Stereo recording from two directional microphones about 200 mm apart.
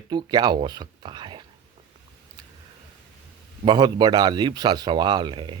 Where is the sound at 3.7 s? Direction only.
20° right (ahead or behind).